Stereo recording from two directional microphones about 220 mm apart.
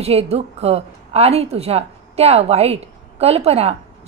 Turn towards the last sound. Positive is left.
turn(degrees=-30)  # may be behind; listen again after turning